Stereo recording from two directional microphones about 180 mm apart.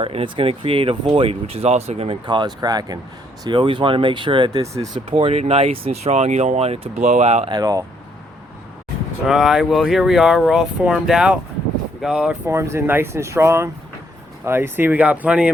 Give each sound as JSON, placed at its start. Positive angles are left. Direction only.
{"t": 0.0, "sound": "speech", "side_deg": -30}
{"t": 7.5, "sound": "speech", "side_deg": -20}
{"t": 9.2, "sound": "speech", "side_deg": 0}